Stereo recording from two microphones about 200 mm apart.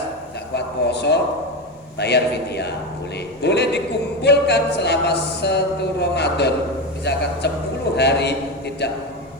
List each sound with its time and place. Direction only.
0.5 s speech: 55° left (ahead or behind)